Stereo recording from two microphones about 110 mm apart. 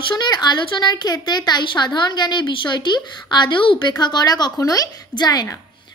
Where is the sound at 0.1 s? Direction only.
40° left (ahead or behind).